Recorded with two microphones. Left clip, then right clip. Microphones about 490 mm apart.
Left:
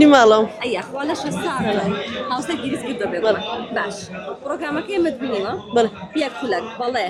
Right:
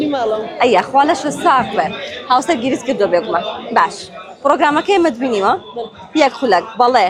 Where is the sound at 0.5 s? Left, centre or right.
Centre.